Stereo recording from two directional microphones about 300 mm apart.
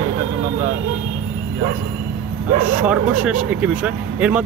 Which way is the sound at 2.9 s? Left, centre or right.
Centre.